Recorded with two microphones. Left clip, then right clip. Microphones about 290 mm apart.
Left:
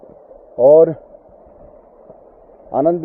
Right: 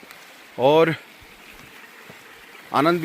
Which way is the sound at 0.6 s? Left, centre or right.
Right.